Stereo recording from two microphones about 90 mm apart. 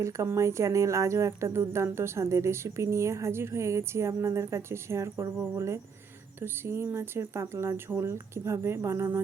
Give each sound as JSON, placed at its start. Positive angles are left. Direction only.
{"t": 0.0, "sound": "speech", "side_deg": -35}